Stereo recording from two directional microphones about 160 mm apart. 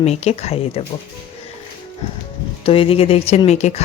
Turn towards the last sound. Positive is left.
turn(degrees=40)  # may be behind; listen again after turning